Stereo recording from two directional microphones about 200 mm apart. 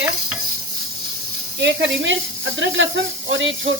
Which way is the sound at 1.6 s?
65° right (ahead or behind).